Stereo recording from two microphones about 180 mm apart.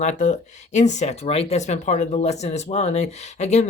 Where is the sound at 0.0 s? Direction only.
40° left (ahead or behind).